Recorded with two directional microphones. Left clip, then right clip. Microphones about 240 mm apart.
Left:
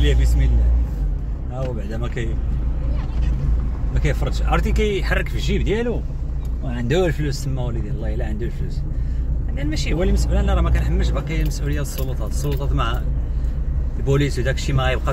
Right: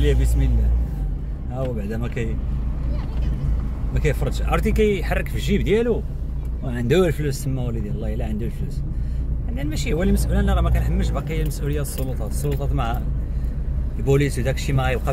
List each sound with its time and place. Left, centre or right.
0.0 s a man's voice: right
1.9 s speech: right
3.9 s speech: right
9.6 s speech: centre
14.0 s speech: centre